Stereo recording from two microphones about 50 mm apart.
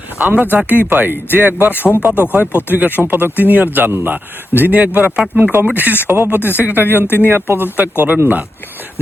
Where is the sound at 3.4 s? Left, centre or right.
Right.